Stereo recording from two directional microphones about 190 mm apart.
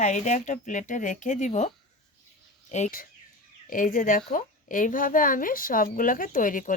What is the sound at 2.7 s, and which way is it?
A woman's voice, 45° left (ahead or behind).